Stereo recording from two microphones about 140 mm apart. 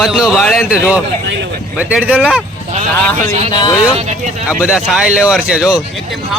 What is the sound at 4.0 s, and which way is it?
Speech, 55° right (ahead or behind).